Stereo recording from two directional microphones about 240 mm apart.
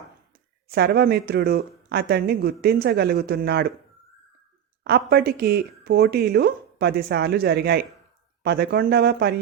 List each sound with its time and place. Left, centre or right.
0.7 s speech: right
4.8 s speech: right